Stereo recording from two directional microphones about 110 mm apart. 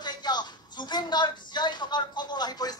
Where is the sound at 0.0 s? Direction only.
40° left (ahead or behind).